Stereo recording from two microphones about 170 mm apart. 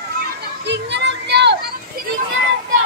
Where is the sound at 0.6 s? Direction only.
90° right.